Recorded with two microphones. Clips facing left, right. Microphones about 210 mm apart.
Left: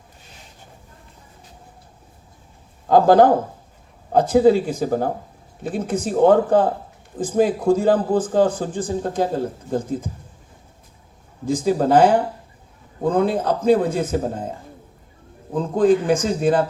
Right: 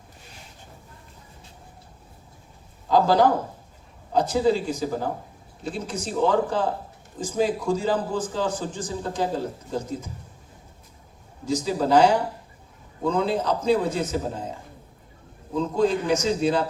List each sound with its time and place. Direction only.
2.9 s a man's voice: 50° left (ahead or behind)
11.4 s a man's voice: 55° left (ahead or behind)
15.5 s a man's voice: 50° left (ahead or behind)